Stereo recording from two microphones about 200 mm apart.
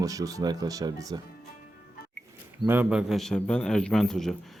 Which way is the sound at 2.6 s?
10° right (ahead or behind).